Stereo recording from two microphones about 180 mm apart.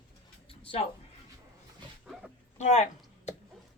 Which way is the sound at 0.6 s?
30° left (ahead or behind).